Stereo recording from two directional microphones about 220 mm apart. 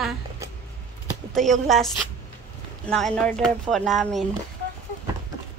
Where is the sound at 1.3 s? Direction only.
Centre (ahead or behind).